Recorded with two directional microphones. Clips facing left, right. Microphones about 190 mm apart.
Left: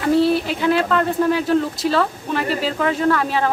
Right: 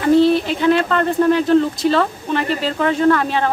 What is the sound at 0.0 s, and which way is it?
Speech, 5° left (ahead or behind).